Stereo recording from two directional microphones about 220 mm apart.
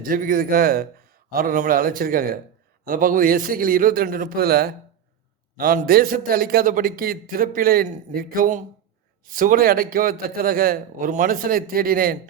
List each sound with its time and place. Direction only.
0.0 s a man's voice: 40° right (ahead or behind)